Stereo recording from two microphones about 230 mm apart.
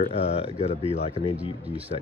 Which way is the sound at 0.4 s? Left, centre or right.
Left.